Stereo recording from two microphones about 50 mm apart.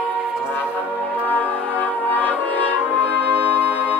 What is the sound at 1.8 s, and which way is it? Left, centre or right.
Brass instrument, left.